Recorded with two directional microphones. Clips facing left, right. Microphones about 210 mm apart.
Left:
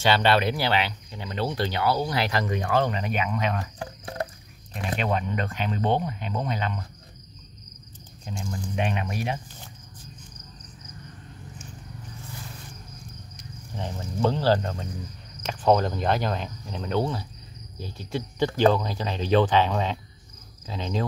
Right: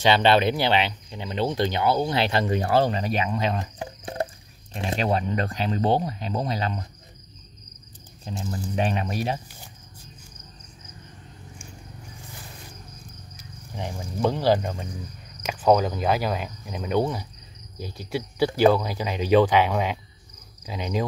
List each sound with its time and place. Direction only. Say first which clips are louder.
0.0 s speech: right 3 dB; 20° right (ahead or behind)
8.7 s speech: right 3 dB; 35° right (ahead or behind)
13.4 s speech: right 1 dB; 10° right (ahead or behind)